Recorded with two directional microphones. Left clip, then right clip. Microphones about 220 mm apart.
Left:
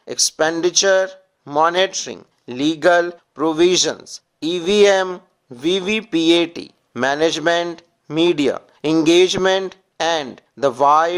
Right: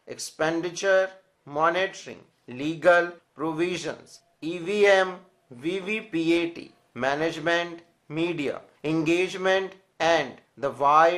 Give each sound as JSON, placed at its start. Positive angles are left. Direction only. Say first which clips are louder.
{"t": 0.0, "sound": "speech", "louder": "left 10 dB", "side_deg": 40}